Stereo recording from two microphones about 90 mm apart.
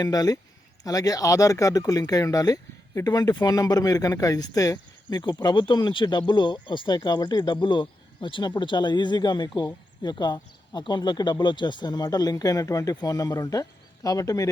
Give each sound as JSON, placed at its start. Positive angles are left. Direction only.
{"t": 0.0, "sound": "speech", "side_deg": 45}